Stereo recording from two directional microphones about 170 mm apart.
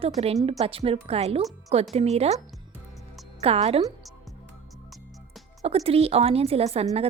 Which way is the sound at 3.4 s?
35° right (ahead or behind).